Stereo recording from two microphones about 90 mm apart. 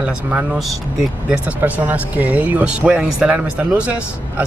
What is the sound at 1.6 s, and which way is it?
Speech, 20° right (ahead or behind).